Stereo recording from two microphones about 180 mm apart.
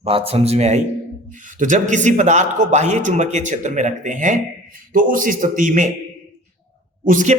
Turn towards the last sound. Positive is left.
turn(degrees=-45)  # may be behind; listen again after turning